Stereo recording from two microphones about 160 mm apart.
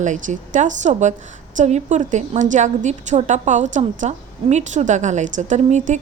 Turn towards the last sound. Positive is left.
turn(degrees=-45)  # may be behind; listen again after turning